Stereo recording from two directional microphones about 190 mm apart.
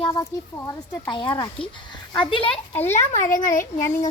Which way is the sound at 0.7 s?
15° left (ahead or behind).